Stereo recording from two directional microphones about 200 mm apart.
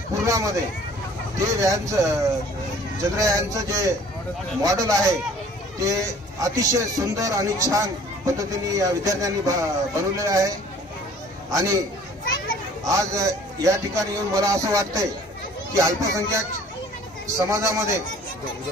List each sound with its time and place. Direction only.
0.2 s a man's voice: 15° right (ahead or behind)
11.5 s a man's voice: 15° right (ahead or behind)
12.8 s a man's voice: 15° right (ahead or behind)
17.5 s a man's voice: 15° right (ahead or behind)